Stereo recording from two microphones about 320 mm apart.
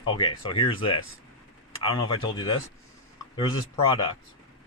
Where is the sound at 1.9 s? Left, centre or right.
Left.